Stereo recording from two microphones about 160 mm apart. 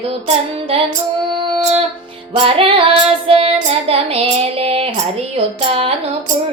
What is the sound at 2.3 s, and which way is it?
Child singing, 35° right (ahead or behind).